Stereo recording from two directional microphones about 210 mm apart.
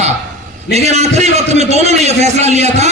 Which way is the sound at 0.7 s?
30° right (ahead or behind).